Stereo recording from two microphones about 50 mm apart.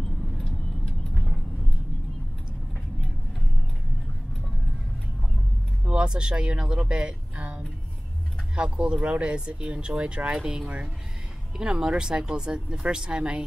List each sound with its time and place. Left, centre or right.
0.4 s vehicle: left
5.9 s speech: centre